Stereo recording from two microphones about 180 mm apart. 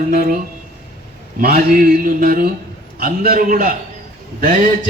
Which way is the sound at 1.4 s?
55° right (ahead or behind).